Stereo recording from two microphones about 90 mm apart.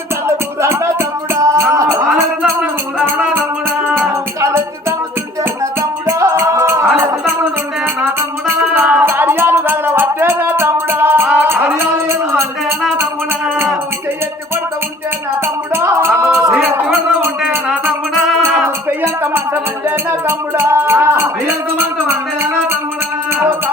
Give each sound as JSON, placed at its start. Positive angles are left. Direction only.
{"t": 0.3, "sound": "music", "side_deg": -30}
{"t": 2.0, "sound": "music", "side_deg": -5}
{"t": 3.2, "sound": "music", "side_deg": -20}
{"t": 6.1, "sound": "music", "side_deg": -30}
{"t": 8.4, "sound": "music", "side_deg": -25}
{"t": 15.7, "sound": "music", "side_deg": -25}
{"t": 16.6, "sound": "a sound", "side_deg": -20}
{"t": 18.9, "sound": "music", "side_deg": -25}